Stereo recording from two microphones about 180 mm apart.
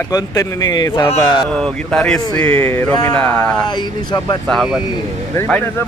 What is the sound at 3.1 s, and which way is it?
Speech, 5° left (ahead or behind).